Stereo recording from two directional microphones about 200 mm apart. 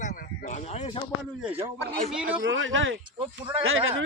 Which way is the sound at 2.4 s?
70° right (ahead or behind).